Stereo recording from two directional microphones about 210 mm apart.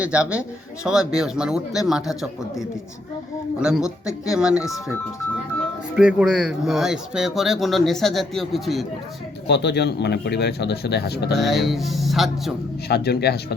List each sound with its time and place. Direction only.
0.0 s speech: 5° right (ahead or behind)
6.0 s speech: 5° right (ahead or behind)
9.5 s a man's voice: 55° left (ahead or behind)
11.3 s speech: centre (ahead or behind)
12.9 s a man's voice: 50° left (ahead or behind)